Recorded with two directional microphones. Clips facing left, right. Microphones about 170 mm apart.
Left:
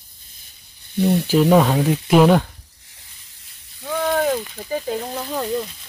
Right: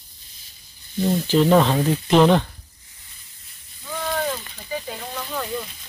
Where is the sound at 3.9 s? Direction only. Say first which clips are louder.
Left 6 dB; 60° left (ahead or behind); by 5.1 s 45° left (ahead or behind).